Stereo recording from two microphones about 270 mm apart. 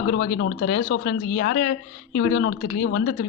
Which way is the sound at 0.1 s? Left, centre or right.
Left.